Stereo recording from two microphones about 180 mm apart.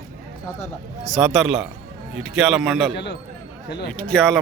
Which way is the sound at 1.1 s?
Centre (ahead or behind).